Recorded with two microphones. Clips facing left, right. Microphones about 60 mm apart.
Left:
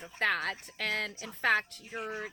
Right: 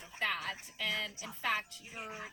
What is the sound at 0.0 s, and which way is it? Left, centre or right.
A woman's voice, left.